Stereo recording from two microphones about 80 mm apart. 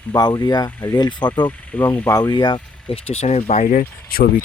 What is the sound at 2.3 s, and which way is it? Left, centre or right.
Speech, left.